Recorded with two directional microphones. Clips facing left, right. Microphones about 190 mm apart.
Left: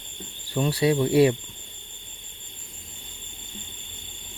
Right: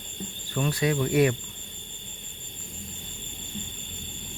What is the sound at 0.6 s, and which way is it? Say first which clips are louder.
Speech: left 4 dB; 30° left (ahead or behind).